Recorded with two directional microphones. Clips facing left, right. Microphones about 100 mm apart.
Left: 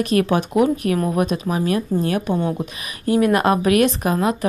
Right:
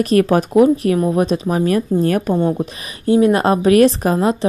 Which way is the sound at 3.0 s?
25° right (ahead or behind).